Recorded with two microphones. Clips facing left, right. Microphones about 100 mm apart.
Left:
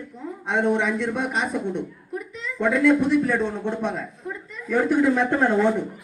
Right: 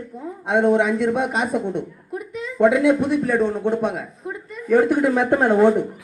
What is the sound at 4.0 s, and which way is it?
Speech, 55° right (ahead or behind).